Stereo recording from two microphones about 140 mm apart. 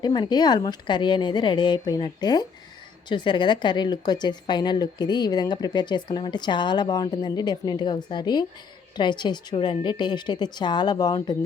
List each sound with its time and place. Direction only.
0.0 s speech: 30° left (ahead or behind)